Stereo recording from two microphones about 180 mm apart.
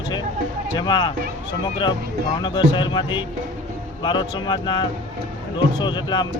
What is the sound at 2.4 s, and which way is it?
Speech, 25° left (ahead or behind).